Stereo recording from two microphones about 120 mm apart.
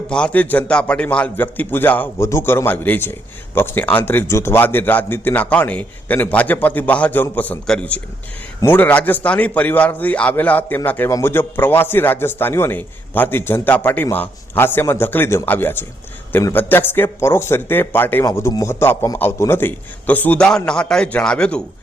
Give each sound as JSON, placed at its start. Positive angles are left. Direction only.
{"t": 0.1, "sound": "a man's voice", "side_deg": 10}
{"t": 18.3, "sound": "a man's voice", "side_deg": 30}